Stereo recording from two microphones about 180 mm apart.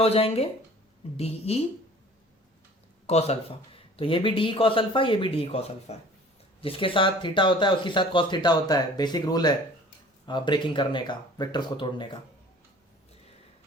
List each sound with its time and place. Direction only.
0.0 s speech: 35° left (ahead or behind)
3.1 s speech: 35° left (ahead or behind)